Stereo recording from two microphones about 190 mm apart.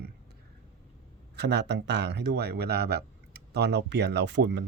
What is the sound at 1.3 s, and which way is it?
Speech, 65° right (ahead or behind).